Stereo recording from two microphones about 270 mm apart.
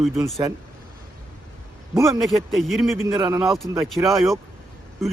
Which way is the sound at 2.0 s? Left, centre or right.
Centre.